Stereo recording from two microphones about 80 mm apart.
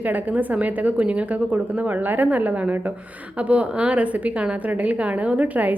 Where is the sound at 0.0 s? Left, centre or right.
Right.